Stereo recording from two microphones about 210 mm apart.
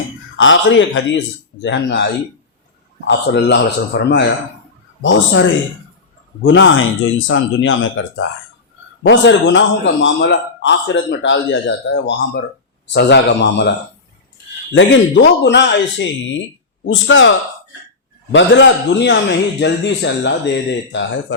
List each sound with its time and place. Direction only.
0.3 s a man's voice: 65° left (ahead or behind)
3.1 s a man's voice: 55° left (ahead or behind)
14.8 s a man's voice: 60° left (ahead or behind)